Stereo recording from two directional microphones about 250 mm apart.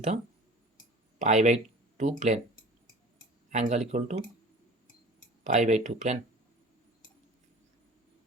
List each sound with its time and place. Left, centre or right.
1.2 s speech: right
3.5 s speech: right
5.4 s speech: right